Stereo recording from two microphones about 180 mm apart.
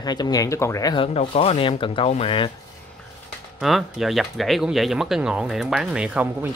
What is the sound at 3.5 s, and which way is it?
Speech, centre (ahead or behind).